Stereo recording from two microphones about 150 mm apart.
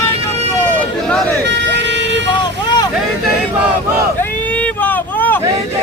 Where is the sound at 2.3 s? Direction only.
30° left (ahead or behind).